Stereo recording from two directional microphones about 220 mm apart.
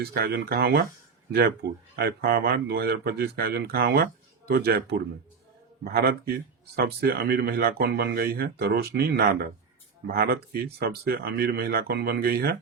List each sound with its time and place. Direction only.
0.0 s speech: 45° right (ahead or behind)